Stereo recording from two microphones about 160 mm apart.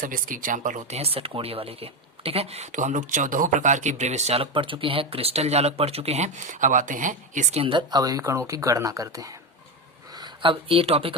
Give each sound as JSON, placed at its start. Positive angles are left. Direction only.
{"t": 0.0, "sound": "speech", "side_deg": -60}
{"t": 7.6, "sound": "speech", "side_deg": -30}